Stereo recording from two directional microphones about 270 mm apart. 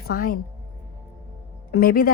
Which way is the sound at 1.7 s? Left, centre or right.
Left.